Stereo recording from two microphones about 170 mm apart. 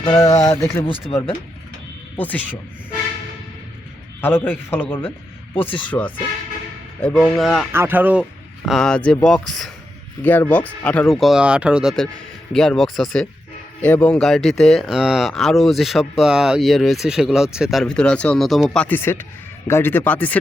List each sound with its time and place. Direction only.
0.1 s a man's voice: 20° left (ahead or behind)
2.1 s a man's voice: 10° left (ahead or behind)
4.2 s a man's voice: 10° left (ahead or behind)
7.7 s a man's voice: 10° right (ahead or behind); by 20.3 s 10° left (ahead or behind)